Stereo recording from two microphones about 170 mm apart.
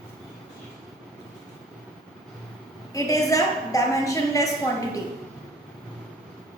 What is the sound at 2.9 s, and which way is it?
A woman's voice, 20° left (ahead or behind).